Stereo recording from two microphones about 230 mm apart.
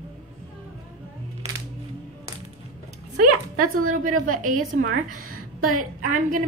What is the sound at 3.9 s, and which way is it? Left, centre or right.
A woman's voice, right.